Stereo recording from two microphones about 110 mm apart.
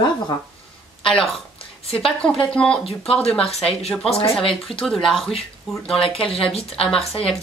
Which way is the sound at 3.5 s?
70° left (ahead or behind).